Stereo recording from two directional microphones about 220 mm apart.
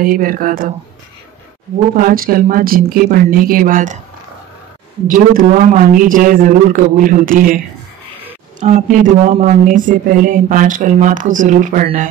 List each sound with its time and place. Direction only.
0.0 s speech: 40° right (ahead or behind)
2.0 s speech: 40° right (ahead or behind)
5.0 s speech: 40° right (ahead or behind)